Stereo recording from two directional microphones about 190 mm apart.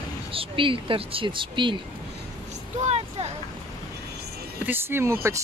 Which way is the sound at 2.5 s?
35° right (ahead or behind).